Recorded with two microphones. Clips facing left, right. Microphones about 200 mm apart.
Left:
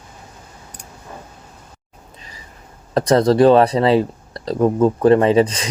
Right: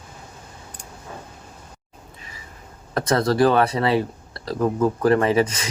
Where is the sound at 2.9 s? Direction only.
30° left (ahead or behind).